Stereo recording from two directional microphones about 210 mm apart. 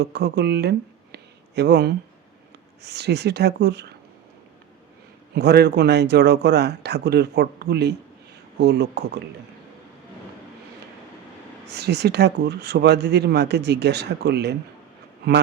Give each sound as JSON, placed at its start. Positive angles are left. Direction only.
{"t": 0.0, "sound": "speech", "side_deg": -50}
{"t": 5.3, "sound": "speech", "side_deg": -50}
{"t": 11.6, "sound": "speech", "side_deg": -50}